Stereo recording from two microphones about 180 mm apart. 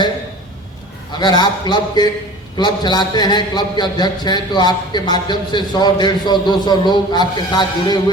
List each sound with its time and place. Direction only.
1.2 s a man's voice: 25° left (ahead or behind)